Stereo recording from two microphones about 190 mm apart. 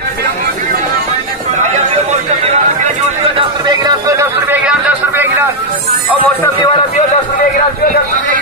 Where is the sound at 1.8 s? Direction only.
40° right (ahead or behind).